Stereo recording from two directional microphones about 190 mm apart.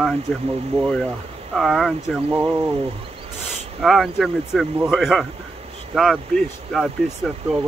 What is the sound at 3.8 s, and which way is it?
Speech, centre (ahead or behind).